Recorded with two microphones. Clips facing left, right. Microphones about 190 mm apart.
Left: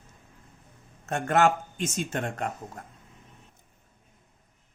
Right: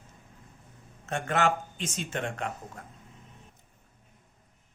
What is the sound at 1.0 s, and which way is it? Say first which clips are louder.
Speech: left 4 dB; 45° left (ahead or behind).